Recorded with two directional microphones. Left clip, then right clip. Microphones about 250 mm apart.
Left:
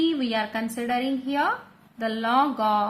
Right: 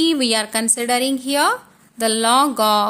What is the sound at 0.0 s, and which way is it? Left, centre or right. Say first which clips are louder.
A woman's voice: right 7 dB; right.